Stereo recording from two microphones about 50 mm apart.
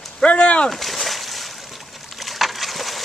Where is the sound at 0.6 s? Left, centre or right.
Centre.